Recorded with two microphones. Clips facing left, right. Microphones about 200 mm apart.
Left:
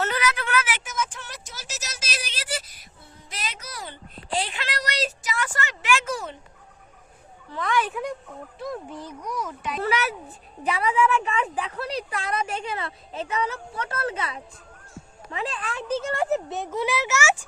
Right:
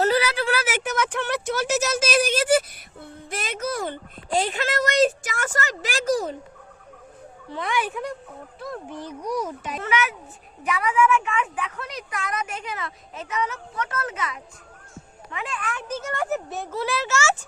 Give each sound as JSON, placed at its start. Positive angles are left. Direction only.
{"t": 0.0, "sound": "a sound", "side_deg": -30}
{"t": 0.8, "sound": "a sound", "side_deg": -65}
{"t": 7.5, "sound": "a woman's voice", "side_deg": -15}
{"t": 7.9, "sound": "speech", "side_deg": 5}
{"t": 9.2, "sound": "speech", "side_deg": -40}
{"t": 9.8, "sound": "a woman's voice", "side_deg": 35}